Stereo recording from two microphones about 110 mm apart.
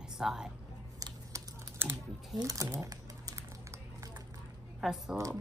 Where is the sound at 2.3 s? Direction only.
30° right (ahead or behind).